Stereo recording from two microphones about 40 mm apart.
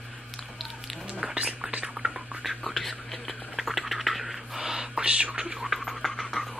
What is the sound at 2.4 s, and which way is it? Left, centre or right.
Whispering, centre.